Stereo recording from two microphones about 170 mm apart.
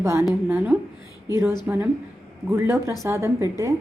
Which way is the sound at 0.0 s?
15° right (ahead or behind).